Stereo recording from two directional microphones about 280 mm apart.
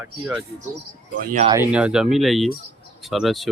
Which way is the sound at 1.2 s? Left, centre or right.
Right.